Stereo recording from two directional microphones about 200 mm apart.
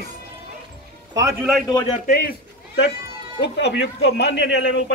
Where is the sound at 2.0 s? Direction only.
50° left (ahead or behind).